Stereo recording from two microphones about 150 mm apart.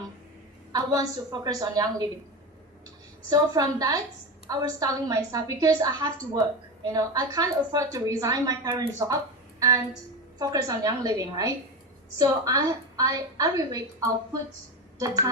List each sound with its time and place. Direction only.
0.7 s a woman's voice: 25° right (ahead or behind)
3.2 s a woman's voice: 25° right (ahead or behind)
14.9 s a woman's voice: 25° right (ahead or behind)